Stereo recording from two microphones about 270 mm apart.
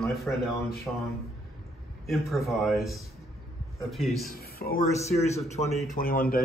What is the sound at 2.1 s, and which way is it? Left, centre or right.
Speech, centre.